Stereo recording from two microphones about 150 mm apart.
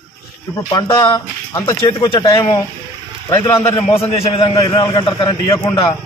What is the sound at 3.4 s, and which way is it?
Speech, 15° left (ahead or behind).